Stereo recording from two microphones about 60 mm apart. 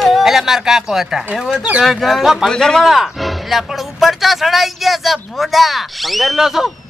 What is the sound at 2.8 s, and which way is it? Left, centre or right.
Speech, centre.